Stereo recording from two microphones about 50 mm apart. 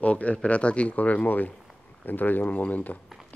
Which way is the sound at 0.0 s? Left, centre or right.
Left.